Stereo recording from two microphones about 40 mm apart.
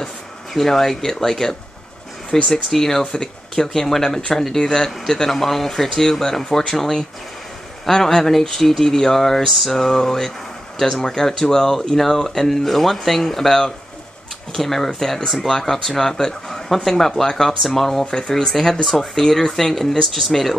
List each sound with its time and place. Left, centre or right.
0.5 s speech: centre
2.5 s speech: centre
18.0 s speech: left
18.5 s speech: centre